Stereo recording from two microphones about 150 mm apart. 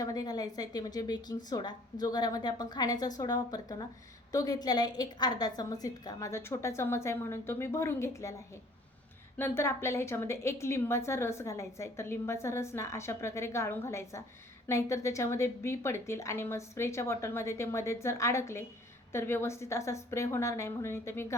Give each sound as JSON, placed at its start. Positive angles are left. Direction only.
{"t": 0.0, "sound": "a woman's voice", "side_deg": 25}
{"t": 9.4, "sound": "a woman's voice", "side_deg": 15}